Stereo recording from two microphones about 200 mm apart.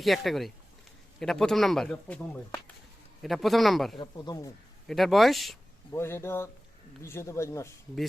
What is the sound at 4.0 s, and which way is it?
Speech, 20° left (ahead or behind).